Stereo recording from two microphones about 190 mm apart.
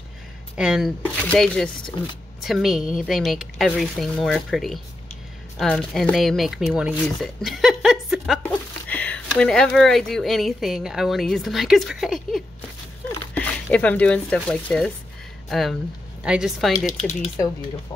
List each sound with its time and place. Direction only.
0.6 s speech: 5° right (ahead or behind)
16.2 s speech: 5° right (ahead or behind)
16.7 s speech: 40° left (ahead or behind)